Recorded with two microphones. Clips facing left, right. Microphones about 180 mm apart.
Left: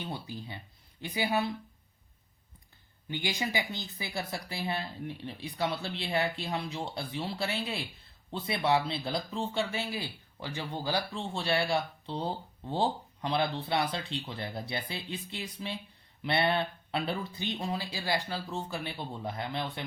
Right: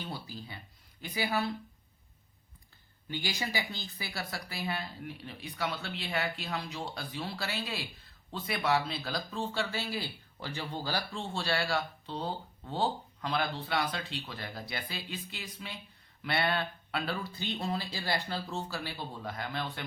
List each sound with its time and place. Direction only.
0.0 s speech: 20° left (ahead or behind)
3.1 s speech: 20° left (ahead or behind)